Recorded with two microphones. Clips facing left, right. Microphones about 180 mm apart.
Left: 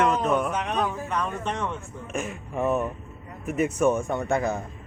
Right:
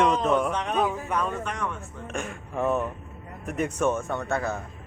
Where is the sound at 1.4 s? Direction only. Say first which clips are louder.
Left 2 dB; 25° left (ahead or behind).